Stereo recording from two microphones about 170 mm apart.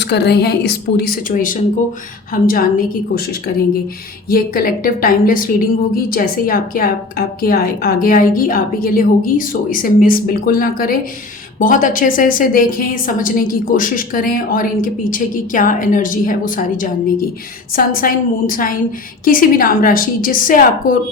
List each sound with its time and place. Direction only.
0.0 s a woman's voice: 75° left (ahead or behind); by 21.0 s 55° left (ahead or behind)